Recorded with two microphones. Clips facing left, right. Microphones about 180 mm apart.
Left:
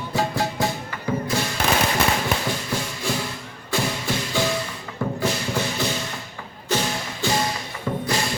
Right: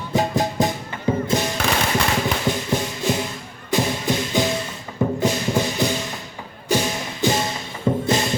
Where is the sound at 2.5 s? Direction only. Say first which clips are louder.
Right 5 dB; 20° right (ahead or behind).